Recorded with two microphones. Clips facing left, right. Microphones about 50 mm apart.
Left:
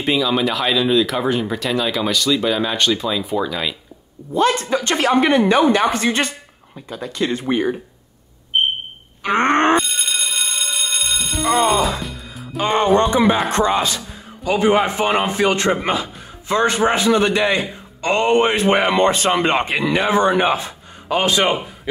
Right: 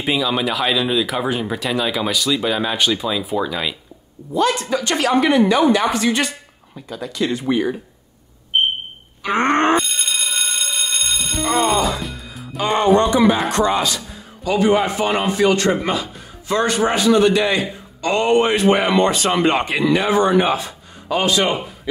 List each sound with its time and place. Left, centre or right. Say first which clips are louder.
0.0 s speech: left 2 dB; centre
4.3 s a man's voice: left 1 dB; left
9.2 s a man's voice: left 1 dB; left
9.8 s music: left 1 dB; centre
13.5 s a man's voice: even; left